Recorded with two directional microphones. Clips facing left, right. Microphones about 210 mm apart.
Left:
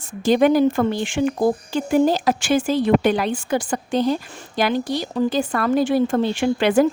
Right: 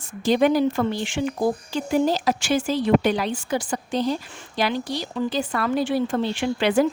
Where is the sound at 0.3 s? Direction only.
50° left (ahead or behind).